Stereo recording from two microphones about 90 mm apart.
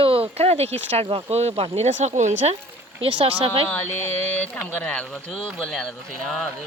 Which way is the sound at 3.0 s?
90° right.